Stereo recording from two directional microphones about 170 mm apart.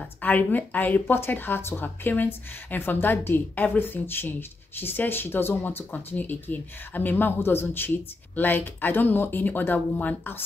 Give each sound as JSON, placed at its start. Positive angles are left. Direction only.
{"t": 0.2, "sound": "speech", "side_deg": 10}